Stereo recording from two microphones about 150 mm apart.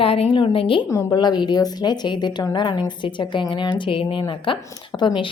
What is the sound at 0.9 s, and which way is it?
A woman's voice, 25° left (ahead or behind).